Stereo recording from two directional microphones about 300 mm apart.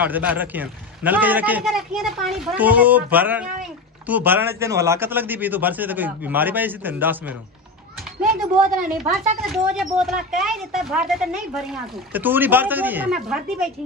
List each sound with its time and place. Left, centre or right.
0.0 s a man's voice: centre
8.2 s speech: right
9.5 s speech: centre